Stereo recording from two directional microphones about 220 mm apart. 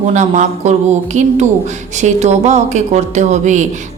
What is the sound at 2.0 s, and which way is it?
A woman's voice, 30° right (ahead or behind).